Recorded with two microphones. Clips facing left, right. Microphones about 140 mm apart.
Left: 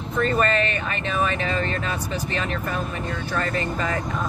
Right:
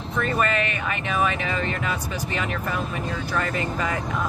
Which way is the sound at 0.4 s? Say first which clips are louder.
Left 2 dB; 10° right (ahead or behind).